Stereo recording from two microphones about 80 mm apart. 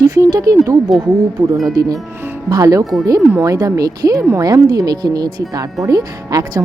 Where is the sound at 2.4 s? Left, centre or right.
Right.